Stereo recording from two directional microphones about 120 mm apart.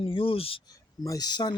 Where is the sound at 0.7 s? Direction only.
30° left (ahead or behind).